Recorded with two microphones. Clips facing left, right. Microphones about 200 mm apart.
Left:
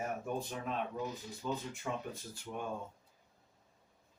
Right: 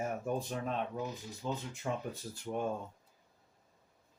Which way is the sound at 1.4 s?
30° right (ahead or behind).